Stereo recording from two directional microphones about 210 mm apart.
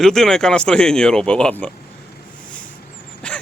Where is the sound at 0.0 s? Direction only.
Centre (ahead or behind).